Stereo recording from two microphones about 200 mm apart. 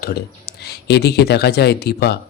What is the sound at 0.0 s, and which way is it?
A man's voice, 50° left (ahead or behind).